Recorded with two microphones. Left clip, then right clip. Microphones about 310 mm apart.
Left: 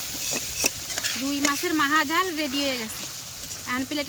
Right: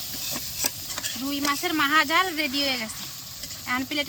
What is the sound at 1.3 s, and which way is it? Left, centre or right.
Speech, centre.